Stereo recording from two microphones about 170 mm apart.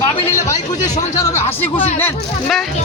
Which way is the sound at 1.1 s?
15° left (ahead or behind).